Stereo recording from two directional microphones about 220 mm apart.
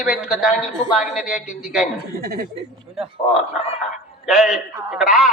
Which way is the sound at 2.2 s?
40° right (ahead or behind).